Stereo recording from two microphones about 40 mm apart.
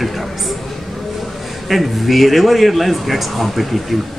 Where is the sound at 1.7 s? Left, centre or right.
Centre.